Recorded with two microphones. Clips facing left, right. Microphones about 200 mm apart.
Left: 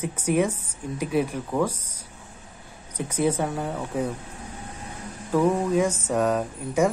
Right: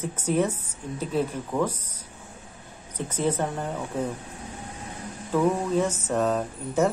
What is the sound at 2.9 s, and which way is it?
Speech, 10° left (ahead or behind).